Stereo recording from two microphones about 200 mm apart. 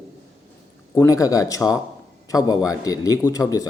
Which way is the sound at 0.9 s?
15° left (ahead or behind).